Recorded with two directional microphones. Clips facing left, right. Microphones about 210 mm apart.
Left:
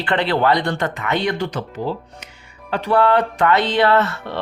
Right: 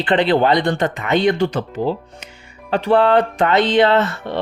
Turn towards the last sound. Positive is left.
turn(degrees=-20)  # may be behind; listen again after turning